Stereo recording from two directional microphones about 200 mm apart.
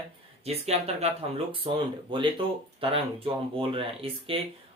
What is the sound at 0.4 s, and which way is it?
Speech, 30° right (ahead or behind).